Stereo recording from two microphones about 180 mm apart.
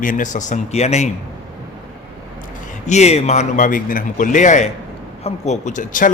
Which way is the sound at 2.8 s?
40° left (ahead or behind).